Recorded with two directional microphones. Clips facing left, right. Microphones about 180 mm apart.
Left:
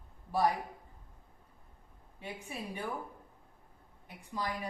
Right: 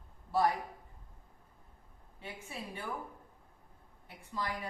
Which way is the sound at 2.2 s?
15° left (ahead or behind).